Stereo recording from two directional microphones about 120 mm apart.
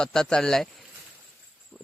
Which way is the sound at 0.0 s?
5° left (ahead or behind).